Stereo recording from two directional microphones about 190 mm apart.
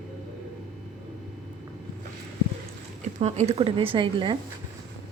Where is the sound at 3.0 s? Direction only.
35° right (ahead or behind).